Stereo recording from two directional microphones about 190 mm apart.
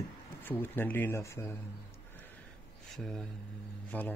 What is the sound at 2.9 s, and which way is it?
Speech, centre (ahead or behind).